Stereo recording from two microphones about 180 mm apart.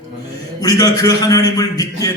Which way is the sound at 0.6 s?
20° left (ahead or behind).